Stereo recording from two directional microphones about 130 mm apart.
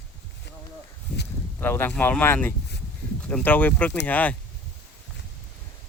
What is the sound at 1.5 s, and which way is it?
Speech, 15° left (ahead or behind).